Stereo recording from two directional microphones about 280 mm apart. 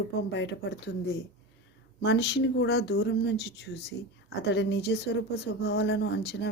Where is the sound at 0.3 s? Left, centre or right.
Left.